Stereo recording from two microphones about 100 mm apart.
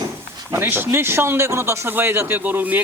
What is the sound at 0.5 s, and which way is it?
Speech, 20° right (ahead or behind).